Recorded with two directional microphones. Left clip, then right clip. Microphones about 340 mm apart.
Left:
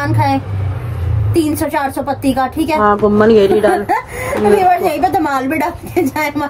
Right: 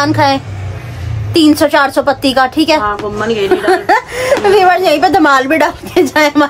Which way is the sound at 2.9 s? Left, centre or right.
Left.